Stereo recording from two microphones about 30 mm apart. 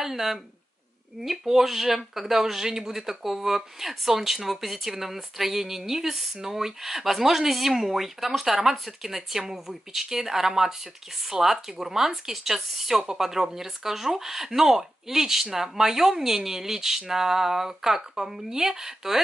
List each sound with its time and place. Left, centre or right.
0.0 s speech: centre